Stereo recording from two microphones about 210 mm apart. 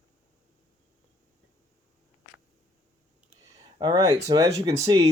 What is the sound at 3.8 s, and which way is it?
Speech, 20° right (ahead or behind).